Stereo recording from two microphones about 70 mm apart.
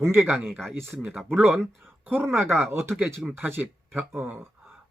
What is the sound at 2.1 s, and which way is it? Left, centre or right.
Speech, right.